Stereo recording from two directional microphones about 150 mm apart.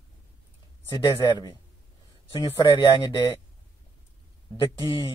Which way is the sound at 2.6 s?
30° left (ahead or behind).